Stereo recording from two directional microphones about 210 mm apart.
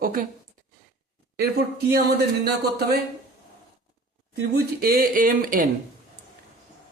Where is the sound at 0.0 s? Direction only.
40° right (ahead or behind).